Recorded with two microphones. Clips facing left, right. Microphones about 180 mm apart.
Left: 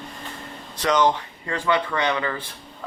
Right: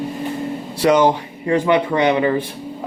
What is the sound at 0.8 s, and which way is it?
Speech, 10° right (ahead or behind).